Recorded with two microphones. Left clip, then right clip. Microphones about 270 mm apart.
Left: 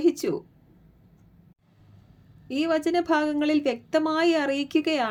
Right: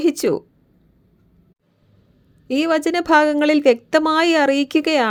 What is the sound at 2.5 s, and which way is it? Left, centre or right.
A woman's voice, right.